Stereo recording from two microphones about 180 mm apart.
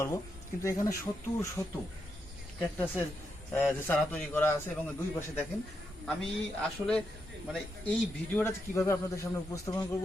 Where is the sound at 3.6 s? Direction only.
10° left (ahead or behind).